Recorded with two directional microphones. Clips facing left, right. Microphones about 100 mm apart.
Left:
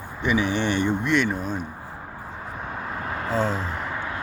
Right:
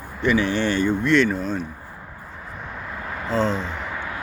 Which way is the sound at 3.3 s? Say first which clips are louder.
Right 3 dB; 10° left (ahead or behind).